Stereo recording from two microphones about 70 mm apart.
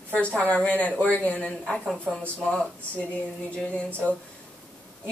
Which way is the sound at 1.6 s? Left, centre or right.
Centre.